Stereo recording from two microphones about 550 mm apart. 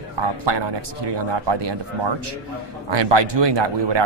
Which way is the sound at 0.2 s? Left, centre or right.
Right.